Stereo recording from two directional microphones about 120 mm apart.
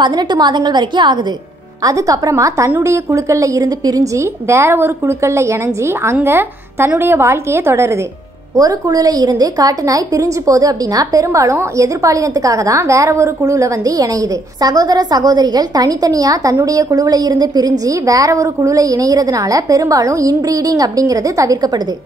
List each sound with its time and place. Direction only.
0.0 s a woman's voice: 35° right (ahead or behind)